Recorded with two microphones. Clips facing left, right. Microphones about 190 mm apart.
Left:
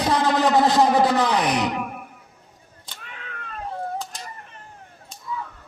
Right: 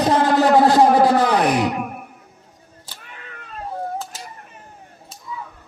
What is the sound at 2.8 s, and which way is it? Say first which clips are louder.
Cat: left 1 dB; 10° right (ahead or behind).